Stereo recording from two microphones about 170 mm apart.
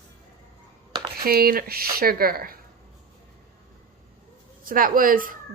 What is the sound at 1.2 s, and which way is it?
Speech, 65° right (ahead or behind).